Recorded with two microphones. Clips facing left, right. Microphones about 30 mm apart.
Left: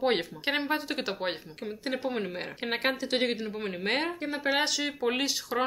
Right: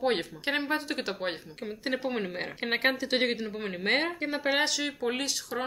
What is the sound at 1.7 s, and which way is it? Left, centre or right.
Speech, centre.